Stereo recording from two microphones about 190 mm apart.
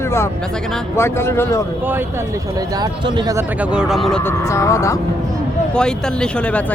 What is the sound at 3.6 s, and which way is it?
Speech, 5° right (ahead or behind).